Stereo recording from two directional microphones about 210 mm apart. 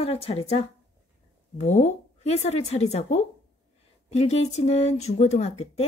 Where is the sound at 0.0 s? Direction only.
30° left (ahead or behind).